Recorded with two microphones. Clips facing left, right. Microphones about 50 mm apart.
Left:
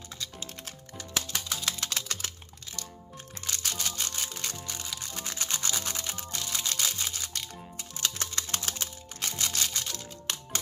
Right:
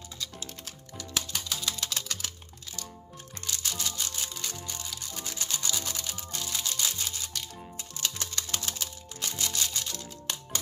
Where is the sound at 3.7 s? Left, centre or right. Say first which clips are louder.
Even; left.